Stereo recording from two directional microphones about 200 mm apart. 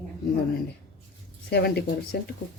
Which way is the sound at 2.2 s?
55° left (ahead or behind).